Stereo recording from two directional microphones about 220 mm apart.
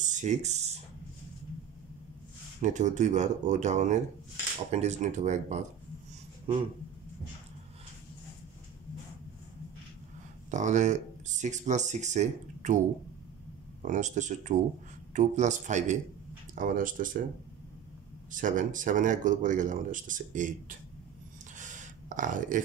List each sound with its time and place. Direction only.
0.0 s a sound: 35° right (ahead or behind)
2.6 s speech: 35° right (ahead or behind)
10.5 s speech: 35° right (ahead or behind)
13.8 s speech: 35° right (ahead or behind)
18.3 s speech: 35° right (ahead or behind)
21.5 s a sound: 35° right (ahead or behind)